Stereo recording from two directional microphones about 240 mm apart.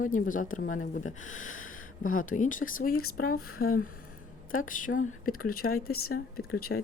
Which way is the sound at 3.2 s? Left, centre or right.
Left.